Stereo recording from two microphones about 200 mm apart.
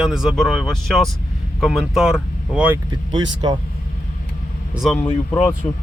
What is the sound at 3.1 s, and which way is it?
Speech, 20° right (ahead or behind).